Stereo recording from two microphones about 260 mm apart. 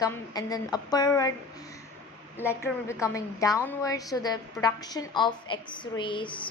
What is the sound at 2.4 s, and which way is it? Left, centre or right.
A woman's voice, centre.